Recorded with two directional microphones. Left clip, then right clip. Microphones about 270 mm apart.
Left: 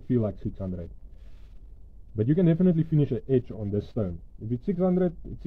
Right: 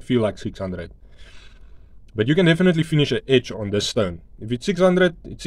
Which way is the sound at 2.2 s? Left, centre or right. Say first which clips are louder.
Right 7 dB; centre.